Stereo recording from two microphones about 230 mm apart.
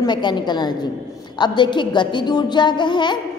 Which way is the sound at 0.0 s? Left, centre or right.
Centre.